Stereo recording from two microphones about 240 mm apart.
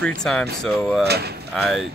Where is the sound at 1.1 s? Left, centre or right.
Right.